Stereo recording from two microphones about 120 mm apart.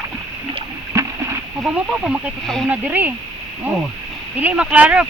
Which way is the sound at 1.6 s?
5° right (ahead or behind).